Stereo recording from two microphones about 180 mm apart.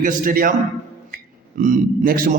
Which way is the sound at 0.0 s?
50° right (ahead or behind).